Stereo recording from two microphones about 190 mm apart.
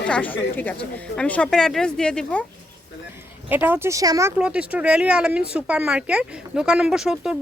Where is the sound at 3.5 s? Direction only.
10° right (ahead or behind).